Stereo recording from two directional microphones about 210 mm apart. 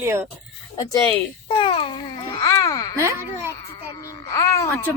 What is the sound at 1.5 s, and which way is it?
Babbling, 25° left (ahead or behind).